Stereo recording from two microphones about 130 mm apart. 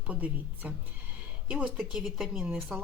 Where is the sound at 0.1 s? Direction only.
10° right (ahead or behind).